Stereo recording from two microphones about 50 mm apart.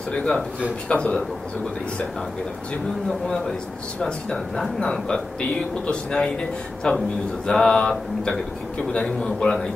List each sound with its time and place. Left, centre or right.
0.1 s speech: centre
3.1 s speech: centre